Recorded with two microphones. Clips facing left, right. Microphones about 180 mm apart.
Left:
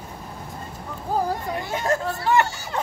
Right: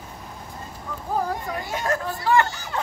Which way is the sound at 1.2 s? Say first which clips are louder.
Left 2 dB; 30° left (ahead or behind).